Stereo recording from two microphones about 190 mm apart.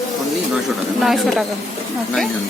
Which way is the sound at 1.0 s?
Centre (ahead or behind).